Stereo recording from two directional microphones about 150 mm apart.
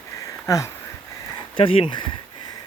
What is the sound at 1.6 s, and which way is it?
Speech, 40° left (ahead or behind).